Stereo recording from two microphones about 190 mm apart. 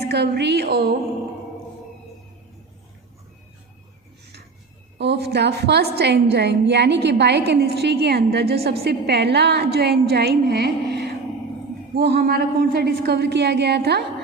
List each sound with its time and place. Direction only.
0.0 s a woman's voice: 60° right (ahead or behind)
4.9 s a woman's voice: 60° right (ahead or behind)